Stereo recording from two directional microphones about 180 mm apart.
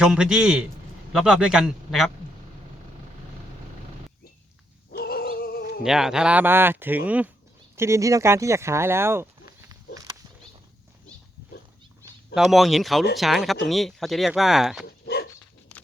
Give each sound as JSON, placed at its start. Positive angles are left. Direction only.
{"t": 0.0, "sound": "speech", "side_deg": -5}
{"t": 4.9, "sound": "a sound", "side_deg": 60}
{"t": 5.8, "sound": "speech", "side_deg": -5}
{"t": 12.3, "sound": "speech", "side_deg": 0}
{"t": 14.8, "sound": "dog", "side_deg": 60}